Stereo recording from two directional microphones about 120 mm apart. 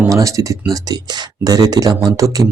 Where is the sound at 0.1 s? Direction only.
25° right (ahead or behind).